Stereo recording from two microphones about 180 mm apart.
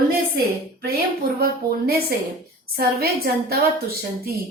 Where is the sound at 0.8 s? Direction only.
55° right (ahead or behind).